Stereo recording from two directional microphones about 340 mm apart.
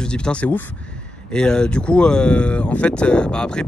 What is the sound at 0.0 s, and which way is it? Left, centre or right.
Speech, centre.